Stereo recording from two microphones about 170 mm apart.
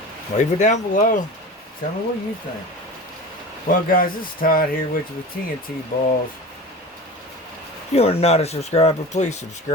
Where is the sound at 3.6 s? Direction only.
55° left (ahead or behind).